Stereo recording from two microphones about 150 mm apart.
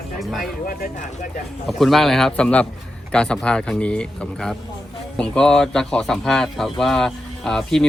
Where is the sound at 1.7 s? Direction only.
Centre (ahead or behind).